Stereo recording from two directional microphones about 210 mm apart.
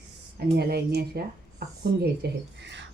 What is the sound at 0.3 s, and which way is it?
Speech, 50° right (ahead or behind).